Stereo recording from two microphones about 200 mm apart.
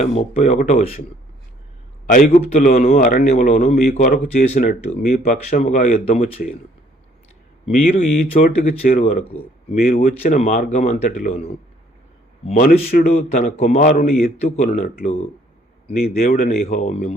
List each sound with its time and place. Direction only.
0.0 s speech: 35° left (ahead or behind)
2.0 s speech: 35° left (ahead or behind)
2.9 s speech: 45° left (ahead or behind)
7.6 s speech: 30° left (ahead or behind)
8.8 s speech: 45° left (ahead or behind)
14.4 s speech: 35° left (ahead or behind)